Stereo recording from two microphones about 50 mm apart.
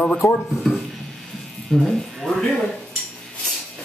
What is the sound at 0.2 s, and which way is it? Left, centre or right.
Speech, left.